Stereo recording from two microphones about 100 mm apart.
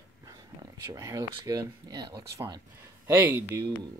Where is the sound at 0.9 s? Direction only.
35° right (ahead or behind).